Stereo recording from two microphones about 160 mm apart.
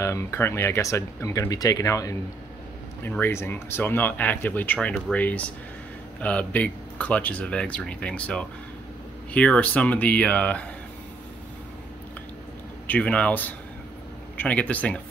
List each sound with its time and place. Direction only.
0.0 s speech: 15° left (ahead or behind)
12.8 s speech: 10° left (ahead or behind)